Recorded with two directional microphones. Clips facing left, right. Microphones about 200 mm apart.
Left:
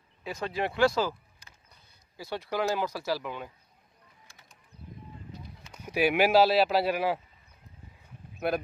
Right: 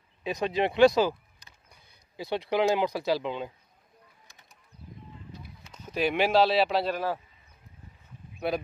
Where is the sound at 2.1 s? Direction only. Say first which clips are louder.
Right 5 dB; 20° right (ahead or behind).